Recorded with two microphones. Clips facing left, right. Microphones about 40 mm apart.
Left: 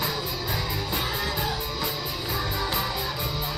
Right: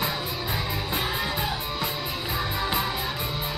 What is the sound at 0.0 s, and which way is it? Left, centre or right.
Music, centre.